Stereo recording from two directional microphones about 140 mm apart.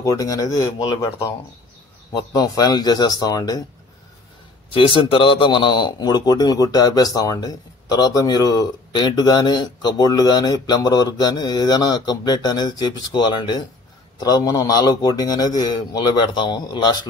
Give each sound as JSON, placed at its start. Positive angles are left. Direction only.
{"t": 0.0, "sound": "a man's voice", "side_deg": 25}
{"t": 4.6, "sound": "a man's voice", "side_deg": 40}